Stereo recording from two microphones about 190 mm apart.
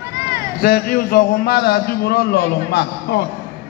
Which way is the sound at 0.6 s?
50° left (ahead or behind).